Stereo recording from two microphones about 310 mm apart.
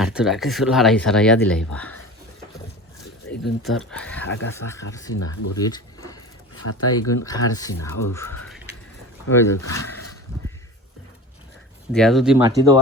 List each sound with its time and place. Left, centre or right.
0.0 s speech: centre
3.4 s speech: centre
4.3 s speech: left
4.5 s speech: centre
5.5 s a sound: centre
6.6 s speech: left
7.3 s speech: centre
11.9 s speech: centre